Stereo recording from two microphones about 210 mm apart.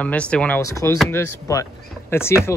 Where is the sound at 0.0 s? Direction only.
5° left (ahead or behind).